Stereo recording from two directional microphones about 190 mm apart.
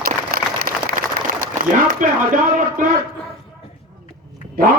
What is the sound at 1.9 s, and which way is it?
Speech, 45° right (ahead or behind).